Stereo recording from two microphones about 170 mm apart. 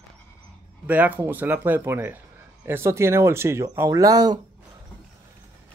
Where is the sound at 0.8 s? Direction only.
10° right (ahead or behind).